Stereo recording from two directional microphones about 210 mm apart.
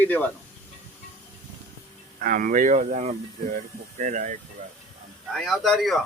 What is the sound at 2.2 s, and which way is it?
Speech, 40° right (ahead or behind).